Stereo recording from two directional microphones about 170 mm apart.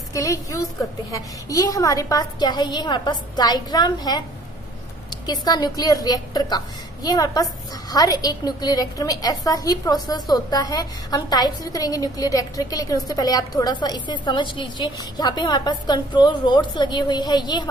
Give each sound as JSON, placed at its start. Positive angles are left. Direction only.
{"t": 0.1, "sound": "a woman's voice", "side_deg": 20}
{"t": 5.2, "sound": "a woman's voice", "side_deg": 25}